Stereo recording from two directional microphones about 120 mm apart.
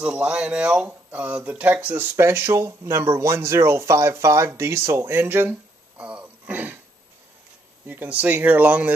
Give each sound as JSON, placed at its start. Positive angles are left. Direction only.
{"t": 0.0, "sound": "speech", "side_deg": -10}
{"t": 7.8, "sound": "speech", "side_deg": -15}